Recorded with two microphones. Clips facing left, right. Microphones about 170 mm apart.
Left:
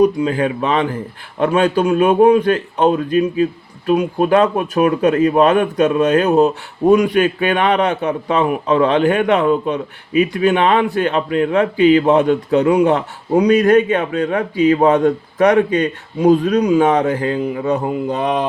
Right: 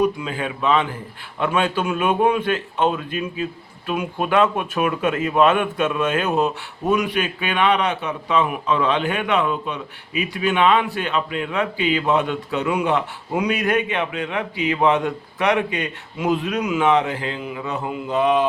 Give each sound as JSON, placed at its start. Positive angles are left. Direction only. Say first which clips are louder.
{"t": 0.0, "sound": "a man's voice", "louder": "left 7 dB", "side_deg": 40}